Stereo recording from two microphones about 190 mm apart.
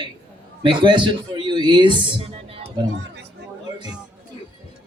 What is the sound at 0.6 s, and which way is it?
A man's voice, 25° right (ahead or behind).